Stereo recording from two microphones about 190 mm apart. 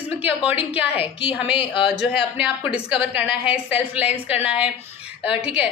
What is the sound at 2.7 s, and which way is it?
A woman's voice, 5° right (ahead or behind).